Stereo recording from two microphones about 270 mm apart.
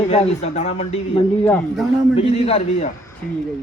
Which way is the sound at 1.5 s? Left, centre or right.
Centre.